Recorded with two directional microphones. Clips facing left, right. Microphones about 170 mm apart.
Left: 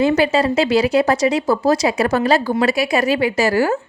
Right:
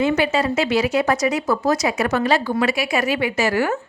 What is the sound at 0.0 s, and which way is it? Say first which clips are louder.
Speech: left 3 dB; 35° left (ahead or behind).